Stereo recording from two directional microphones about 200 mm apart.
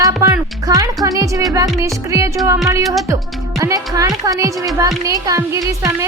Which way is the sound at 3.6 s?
15° right (ahead or behind).